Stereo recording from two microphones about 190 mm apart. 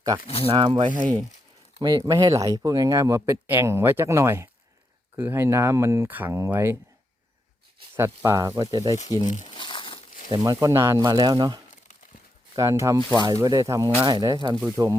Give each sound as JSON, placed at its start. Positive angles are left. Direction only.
{"t": 0.4, "sound": "speech", "side_deg": -25}
{"t": 7.9, "sound": "speech", "side_deg": -15}
{"t": 9.2, "sound": "speech", "side_deg": 40}
{"t": 9.6, "sound": "crumpling", "side_deg": 25}
{"t": 10.3, "sound": "speech", "side_deg": -20}